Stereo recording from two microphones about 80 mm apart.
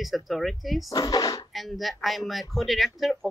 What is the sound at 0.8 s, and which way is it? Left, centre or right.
Speech, left.